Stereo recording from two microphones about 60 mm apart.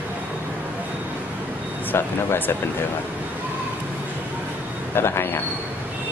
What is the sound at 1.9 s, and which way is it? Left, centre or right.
Speech, left.